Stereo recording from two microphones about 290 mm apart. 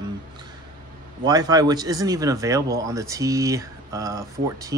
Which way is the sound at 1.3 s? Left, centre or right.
Centre.